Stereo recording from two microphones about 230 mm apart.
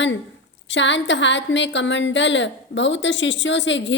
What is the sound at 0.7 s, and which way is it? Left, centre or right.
A woman's voice, left.